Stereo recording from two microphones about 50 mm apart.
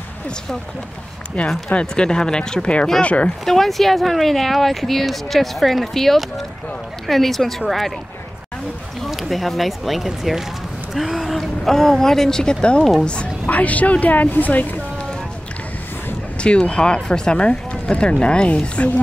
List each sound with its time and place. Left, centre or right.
1.5 s speech: centre
3.4 s speech: centre
9.0 s a woman's voice: centre; by 14.8 s left
16.3 s speech: left